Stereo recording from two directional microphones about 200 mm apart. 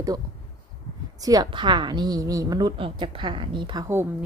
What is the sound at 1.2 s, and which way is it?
A woman's voice, 20° right (ahead or behind).